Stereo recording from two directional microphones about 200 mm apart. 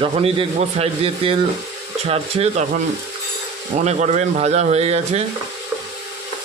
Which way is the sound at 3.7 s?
35° right (ahead or behind).